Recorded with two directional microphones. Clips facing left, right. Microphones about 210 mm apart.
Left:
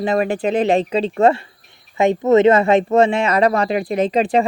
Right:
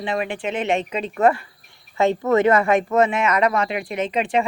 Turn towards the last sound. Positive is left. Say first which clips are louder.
# left 5 dB
turn(degrees=35)  # may be behind; listen again after turning